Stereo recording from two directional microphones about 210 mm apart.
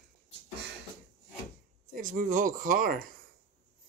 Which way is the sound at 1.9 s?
40° right (ahead or behind).